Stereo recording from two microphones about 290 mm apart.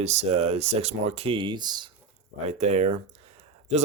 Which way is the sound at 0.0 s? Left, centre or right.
Right.